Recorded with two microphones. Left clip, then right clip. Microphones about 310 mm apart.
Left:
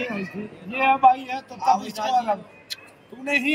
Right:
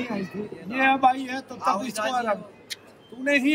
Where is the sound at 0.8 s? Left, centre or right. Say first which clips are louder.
Left 3 dB; centre.